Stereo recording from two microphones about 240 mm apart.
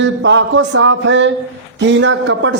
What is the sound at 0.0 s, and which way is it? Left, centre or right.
Speech, right.